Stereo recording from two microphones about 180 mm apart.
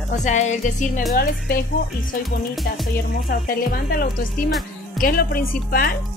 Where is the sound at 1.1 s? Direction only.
55° left (ahead or behind).